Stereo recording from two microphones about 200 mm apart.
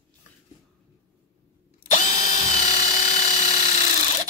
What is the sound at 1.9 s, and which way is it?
Drill, 35° left (ahead or behind).